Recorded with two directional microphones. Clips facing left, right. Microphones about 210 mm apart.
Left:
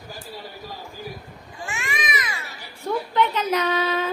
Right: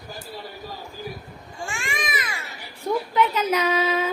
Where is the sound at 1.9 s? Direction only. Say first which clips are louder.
Left 2 dB; 50° right (ahead or behind).